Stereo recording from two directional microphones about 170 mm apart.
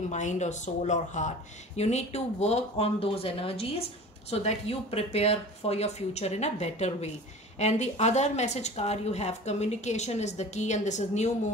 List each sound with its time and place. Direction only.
0.1 s a woman's voice: 45° left (ahead or behind)